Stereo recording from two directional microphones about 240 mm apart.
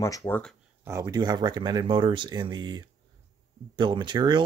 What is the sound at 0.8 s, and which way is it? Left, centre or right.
Speech, centre.